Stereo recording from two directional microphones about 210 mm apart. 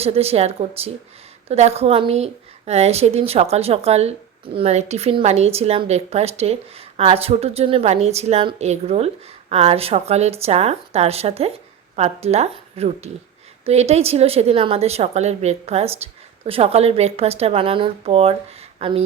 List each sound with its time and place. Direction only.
0.0 s speech: 30° right (ahead or behind)